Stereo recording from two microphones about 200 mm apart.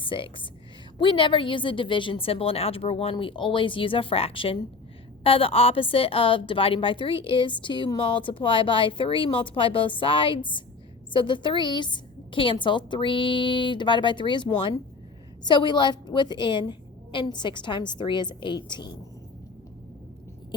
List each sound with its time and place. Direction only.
0.0 s a woman's voice: 25° left (ahead or behind)